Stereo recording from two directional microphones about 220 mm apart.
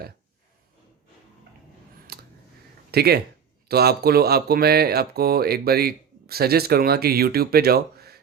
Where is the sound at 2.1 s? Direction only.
45° right (ahead or behind).